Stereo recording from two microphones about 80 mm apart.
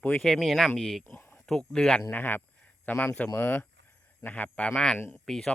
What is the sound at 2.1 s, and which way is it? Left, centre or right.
Speech, left.